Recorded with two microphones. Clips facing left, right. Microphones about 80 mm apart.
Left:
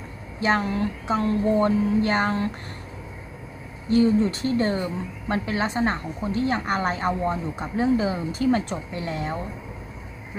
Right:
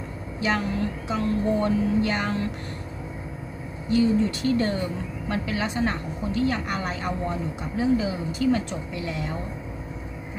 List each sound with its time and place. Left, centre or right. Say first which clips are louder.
0.3 s a woman's voice: left 3 dB; left
3.8 s a woman's voice: left 2 dB; left